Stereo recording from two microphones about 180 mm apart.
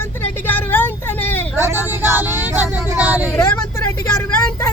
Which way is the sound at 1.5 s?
15° right (ahead or behind).